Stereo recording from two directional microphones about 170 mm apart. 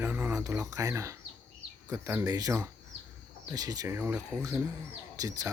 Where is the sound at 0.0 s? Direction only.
15° right (ahead or behind).